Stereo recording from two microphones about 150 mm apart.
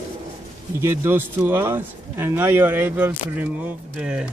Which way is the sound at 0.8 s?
15° right (ahead or behind).